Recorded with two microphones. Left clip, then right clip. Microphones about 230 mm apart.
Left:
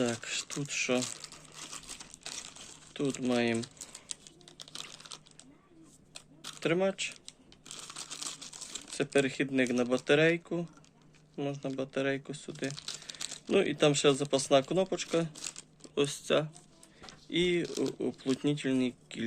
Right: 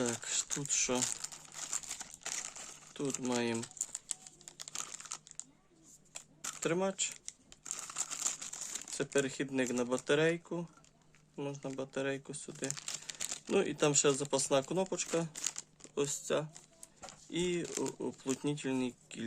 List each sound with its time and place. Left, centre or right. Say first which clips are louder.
0.0 s speech: left 3 dB; right
2.9 s speech: left 5 dB; centre
5.0 s typing: even; centre
6.6 s speech: left 5 dB; centre
7.7 s crumpling: right 1 dB; right
8.5 s speech: left 4 dB; centre